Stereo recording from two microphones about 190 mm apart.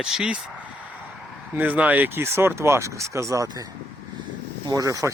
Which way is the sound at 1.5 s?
10° right (ahead or behind).